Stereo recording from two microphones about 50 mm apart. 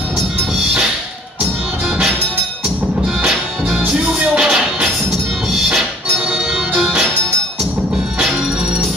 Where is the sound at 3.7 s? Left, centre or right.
Centre.